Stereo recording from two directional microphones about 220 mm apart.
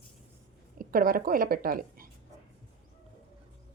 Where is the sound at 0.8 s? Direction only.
40° right (ahead or behind).